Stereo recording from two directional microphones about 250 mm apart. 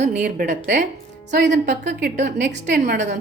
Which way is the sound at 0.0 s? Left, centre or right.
Right.